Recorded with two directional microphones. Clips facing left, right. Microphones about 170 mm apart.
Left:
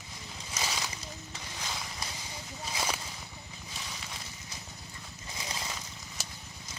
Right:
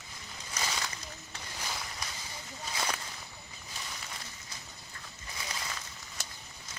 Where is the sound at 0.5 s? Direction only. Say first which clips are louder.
Even; 10° left (ahead or behind).